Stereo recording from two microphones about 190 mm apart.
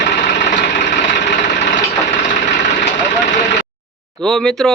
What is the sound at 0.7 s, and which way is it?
Vehicle, 70° left (ahead or behind).